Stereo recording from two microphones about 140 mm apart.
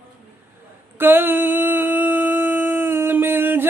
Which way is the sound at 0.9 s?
15° right (ahead or behind).